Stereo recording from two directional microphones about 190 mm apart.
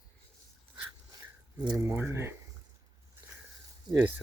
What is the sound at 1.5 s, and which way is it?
Speech, 20° right (ahead or behind).